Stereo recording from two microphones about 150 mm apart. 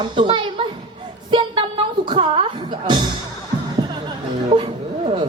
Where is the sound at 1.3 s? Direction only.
35° right (ahead or behind).